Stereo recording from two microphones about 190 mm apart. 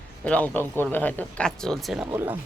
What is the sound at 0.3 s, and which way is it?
A man's voice, 10° left (ahead or behind).